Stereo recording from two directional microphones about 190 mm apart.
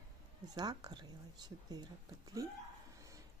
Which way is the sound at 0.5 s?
20° right (ahead or behind).